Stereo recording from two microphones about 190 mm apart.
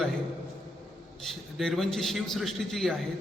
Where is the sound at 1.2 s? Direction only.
Centre (ahead or behind).